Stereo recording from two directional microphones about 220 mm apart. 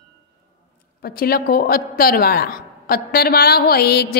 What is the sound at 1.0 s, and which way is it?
A woman's voice, 45° left (ahead or behind).